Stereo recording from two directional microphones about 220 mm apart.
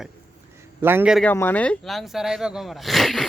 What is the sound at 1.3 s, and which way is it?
Speech, 10° left (ahead or behind).